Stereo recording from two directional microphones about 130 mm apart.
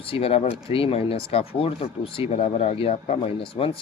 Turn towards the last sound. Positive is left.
turn(degrees=45)  # may be behind; listen again after turning